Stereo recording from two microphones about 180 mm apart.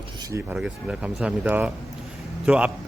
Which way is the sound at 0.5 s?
5° right (ahead or behind).